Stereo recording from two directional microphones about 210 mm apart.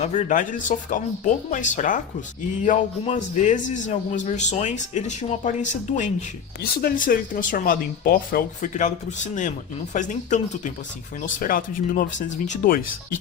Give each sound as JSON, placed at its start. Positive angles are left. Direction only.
{"t": 0.0, "sound": "speech", "side_deg": 35}